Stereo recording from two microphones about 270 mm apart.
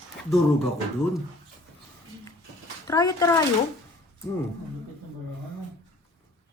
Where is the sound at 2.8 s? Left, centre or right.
Centre.